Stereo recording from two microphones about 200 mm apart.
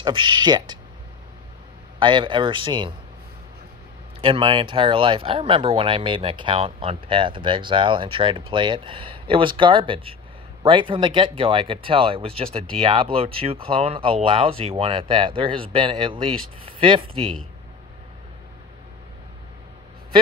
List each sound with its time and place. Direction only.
0.0 s speech: 25° right (ahead or behind)
2.0 s speech: 25° right (ahead or behind)
4.2 s speech: 25° right (ahead or behind)